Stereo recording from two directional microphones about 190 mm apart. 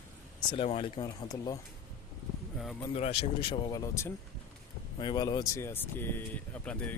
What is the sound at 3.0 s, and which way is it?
Speech, 35° left (ahead or behind).